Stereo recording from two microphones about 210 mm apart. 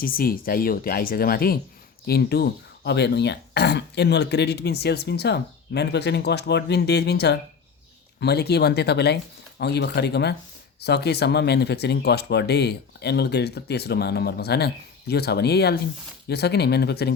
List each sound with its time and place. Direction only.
0.0 s speech: 45° left (ahead or behind)